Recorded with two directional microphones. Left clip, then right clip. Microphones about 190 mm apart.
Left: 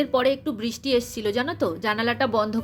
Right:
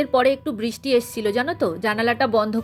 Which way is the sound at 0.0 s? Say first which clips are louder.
Right 3 dB; 25° right (ahead or behind).